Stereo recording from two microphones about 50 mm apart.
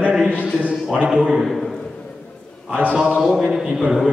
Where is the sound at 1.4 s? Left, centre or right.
Centre.